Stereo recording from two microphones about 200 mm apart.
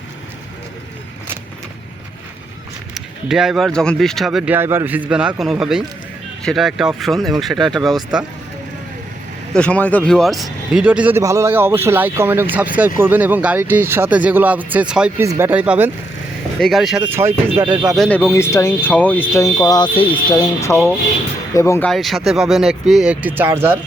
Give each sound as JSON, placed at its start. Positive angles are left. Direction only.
{"t": 2.9, "sound": "speech", "side_deg": 0}
{"t": 9.5, "sound": "speech", "side_deg": 5}
{"t": 17.1, "sound": "speech", "side_deg": -15}
{"t": 17.9, "sound": "speech", "side_deg": 0}
{"t": 18.2, "sound": "speech", "side_deg": 10}